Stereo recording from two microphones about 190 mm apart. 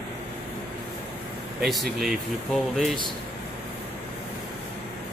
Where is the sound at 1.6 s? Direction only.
Centre (ahead or behind).